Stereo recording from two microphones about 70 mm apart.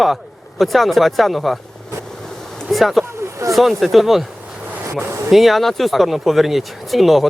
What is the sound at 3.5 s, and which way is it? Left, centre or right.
Speech, centre.